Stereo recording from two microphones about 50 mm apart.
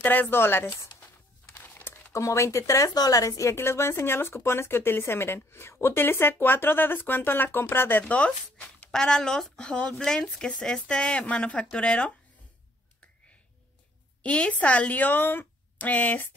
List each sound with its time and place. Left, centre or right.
0.0 s a woman's voice: left
0.4 s speech: left
1.6 s a sound: left
2.1 s speech: left
3.3 s speech: left
8.0 s speech: left
8.9 s speech: centre
9.7 s speech: left
14.2 s a woman's voice: left